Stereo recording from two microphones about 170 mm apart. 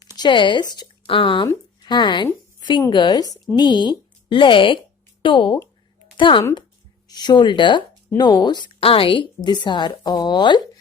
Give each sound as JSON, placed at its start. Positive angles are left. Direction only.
{"t": 0.2, "sound": "a woman's voice", "side_deg": 25}